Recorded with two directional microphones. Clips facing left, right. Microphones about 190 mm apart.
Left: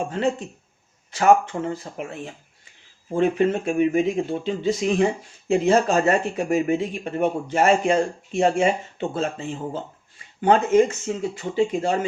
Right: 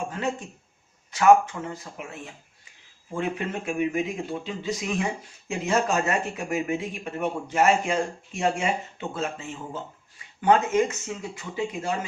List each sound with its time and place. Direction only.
0.1 s speech: 30° left (ahead or behind)
3.1 s speech: 30° left (ahead or behind)